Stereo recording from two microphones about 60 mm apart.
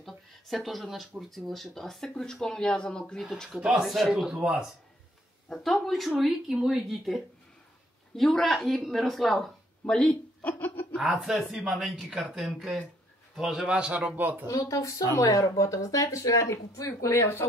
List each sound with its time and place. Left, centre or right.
0.0 s a sound: centre
1.3 s speech: centre
3.5 s speech: centre
5.5 s speech: centre
9.8 s speech: centre
10.4 s a sound: left
11.0 s speech: centre
13.4 s a man's voice: centre
14.5 s speech: left
17.1 s speech: left